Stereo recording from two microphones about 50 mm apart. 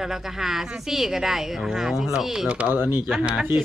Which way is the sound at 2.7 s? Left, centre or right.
Right.